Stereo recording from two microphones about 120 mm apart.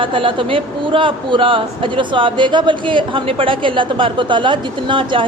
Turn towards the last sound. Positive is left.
turn(degrees=-45)  # may be behind; listen again after turning